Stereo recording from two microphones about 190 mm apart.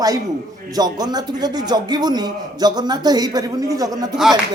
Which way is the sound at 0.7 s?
20° right (ahead or behind).